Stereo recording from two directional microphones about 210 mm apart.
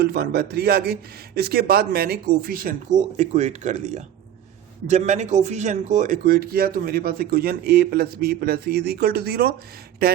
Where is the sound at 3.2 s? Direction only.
30° right (ahead or behind).